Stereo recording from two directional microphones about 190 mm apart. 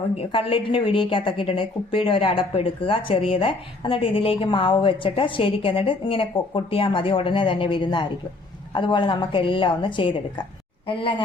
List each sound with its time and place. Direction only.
0.2 s a woman's voice: 30° left (ahead or behind)